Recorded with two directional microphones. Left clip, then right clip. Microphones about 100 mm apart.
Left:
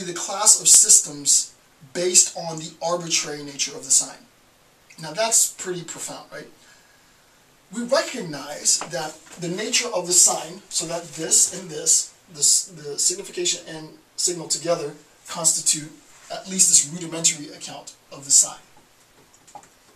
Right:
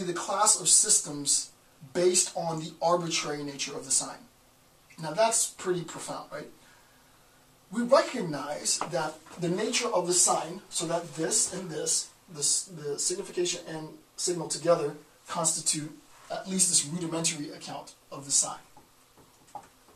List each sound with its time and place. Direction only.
0.0 s speech: centre (ahead or behind)
7.7 s speech: centre (ahead or behind)
19.5 s tick-tock: 10° left (ahead or behind)